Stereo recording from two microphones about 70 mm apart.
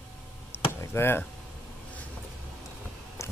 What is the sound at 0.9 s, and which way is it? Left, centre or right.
Speech, left.